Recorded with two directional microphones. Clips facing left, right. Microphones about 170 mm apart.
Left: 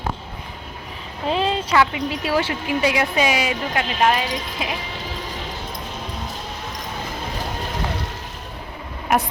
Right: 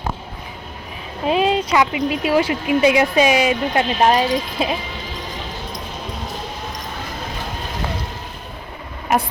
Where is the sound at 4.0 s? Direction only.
35° right (ahead or behind).